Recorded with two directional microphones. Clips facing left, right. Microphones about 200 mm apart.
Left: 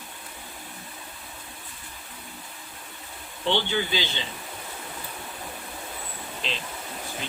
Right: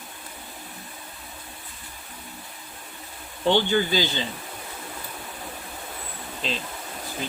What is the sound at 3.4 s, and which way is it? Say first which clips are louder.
Speech: right 5 dB; 45° right (ahead or behind).